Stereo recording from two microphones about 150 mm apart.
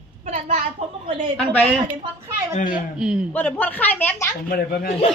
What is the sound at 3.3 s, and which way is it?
Speech, 10° left (ahead or behind).